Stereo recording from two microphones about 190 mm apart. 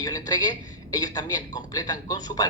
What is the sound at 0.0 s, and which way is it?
A woman's voice, 20° left (ahead or behind).